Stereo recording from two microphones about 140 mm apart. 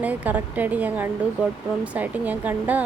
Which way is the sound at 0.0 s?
10° right (ahead or behind).